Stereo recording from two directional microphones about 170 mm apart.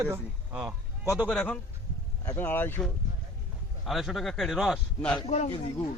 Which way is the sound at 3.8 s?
Centre (ahead or behind).